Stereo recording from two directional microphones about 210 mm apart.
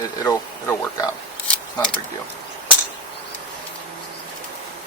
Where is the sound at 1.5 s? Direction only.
5° left (ahead or behind).